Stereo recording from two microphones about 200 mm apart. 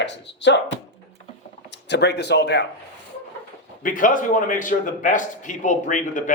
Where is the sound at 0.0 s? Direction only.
60° left (ahead or behind).